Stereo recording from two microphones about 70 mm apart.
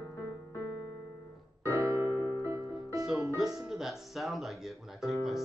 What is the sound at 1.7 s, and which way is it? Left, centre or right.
Piano, right.